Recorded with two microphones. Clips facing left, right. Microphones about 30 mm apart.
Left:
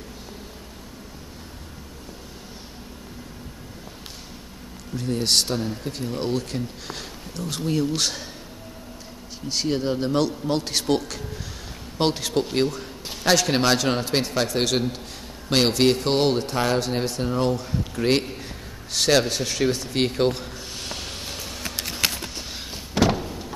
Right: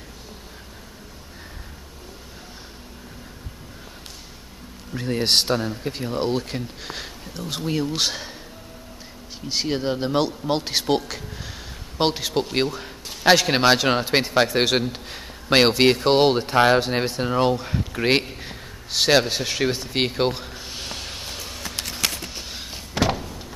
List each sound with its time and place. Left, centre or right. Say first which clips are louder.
4.9 s speech: right 2 dB; right
9.5 s speech: even; centre
12.6 s speech: left 1 dB; centre
20.2 s a sound: left 1 dB; centre